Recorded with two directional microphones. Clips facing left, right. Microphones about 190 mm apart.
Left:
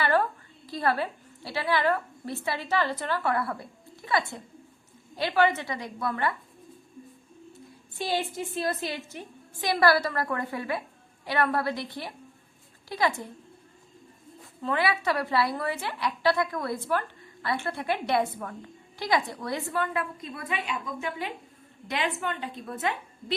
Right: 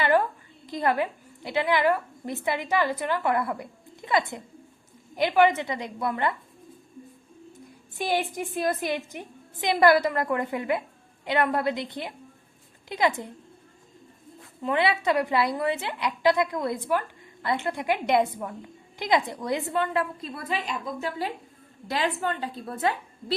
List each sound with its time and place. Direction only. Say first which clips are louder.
0.0 s a sound: right 2 dB; 15° right (ahead or behind)
0.7 s a woman's voice: right 2 dB; 20° right (ahead or behind)
7.9 s a woman's voice: right 2 dB; 15° right (ahead or behind)
14.6 s a woman's voice: right 2 dB; 20° right (ahead or behind)